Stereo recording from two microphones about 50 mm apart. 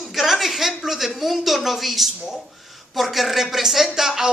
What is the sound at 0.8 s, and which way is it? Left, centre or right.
A woman's voice, centre.